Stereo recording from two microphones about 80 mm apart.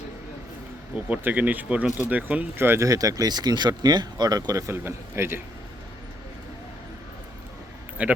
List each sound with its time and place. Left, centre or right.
1.1 s speech: centre
2.8 s speech: right
8.0 s speech: centre